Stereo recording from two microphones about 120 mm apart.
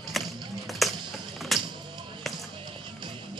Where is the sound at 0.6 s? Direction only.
Centre (ahead or behind).